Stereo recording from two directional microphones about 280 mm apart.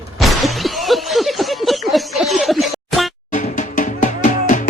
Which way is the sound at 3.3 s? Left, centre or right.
Left.